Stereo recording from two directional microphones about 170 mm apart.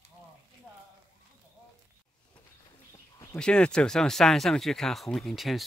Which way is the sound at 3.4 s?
5° left (ahead or behind).